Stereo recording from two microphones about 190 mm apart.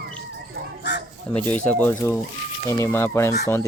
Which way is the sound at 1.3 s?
10° left (ahead or behind).